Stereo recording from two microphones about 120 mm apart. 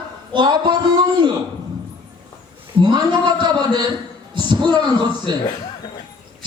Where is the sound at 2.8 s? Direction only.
40° right (ahead or behind).